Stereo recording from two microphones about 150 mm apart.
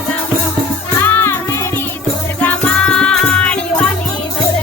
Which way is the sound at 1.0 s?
15° left (ahead or behind).